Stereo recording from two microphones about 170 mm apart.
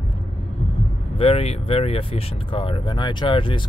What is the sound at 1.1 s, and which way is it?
Speech, 35° left (ahead or behind).